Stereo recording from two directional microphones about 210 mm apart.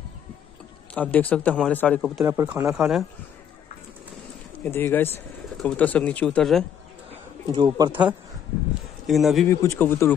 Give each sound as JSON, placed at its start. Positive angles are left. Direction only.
{"t": 0.9, "sound": "speech", "side_deg": 5}
{"t": 2.2, "sound": "speech", "side_deg": -15}
{"t": 4.6, "sound": "speech", "side_deg": 10}
{"t": 7.1, "sound": "speech", "side_deg": -25}
{"t": 9.0, "sound": "speech", "side_deg": 0}
{"t": 9.5, "sound": "speech", "side_deg": 15}